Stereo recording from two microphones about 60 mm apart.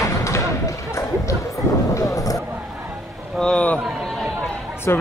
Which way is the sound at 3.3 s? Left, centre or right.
Centre.